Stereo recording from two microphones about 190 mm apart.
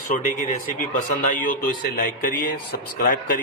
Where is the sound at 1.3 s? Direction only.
45° left (ahead or behind).